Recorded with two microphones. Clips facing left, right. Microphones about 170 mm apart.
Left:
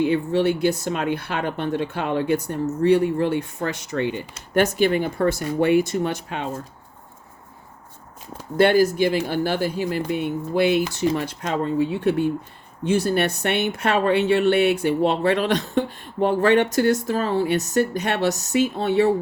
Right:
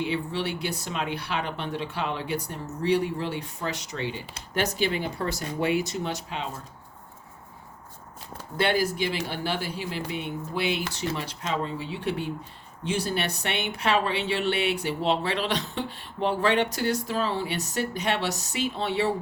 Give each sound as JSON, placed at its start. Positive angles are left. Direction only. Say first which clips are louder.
{"t": 0.0, "sound": "speech", "louder": "left 9 dB", "side_deg": 50}
{"t": 8.5, "sound": "speech", "louder": "left 8 dB", "side_deg": 45}